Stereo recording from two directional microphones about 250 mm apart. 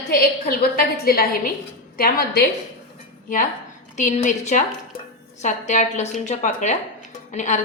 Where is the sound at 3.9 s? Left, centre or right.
Left.